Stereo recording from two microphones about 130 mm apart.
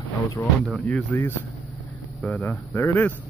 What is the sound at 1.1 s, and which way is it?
Speech, 10° left (ahead or behind).